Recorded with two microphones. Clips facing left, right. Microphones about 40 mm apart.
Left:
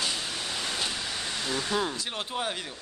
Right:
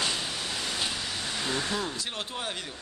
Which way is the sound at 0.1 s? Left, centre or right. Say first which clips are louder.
Even; centre.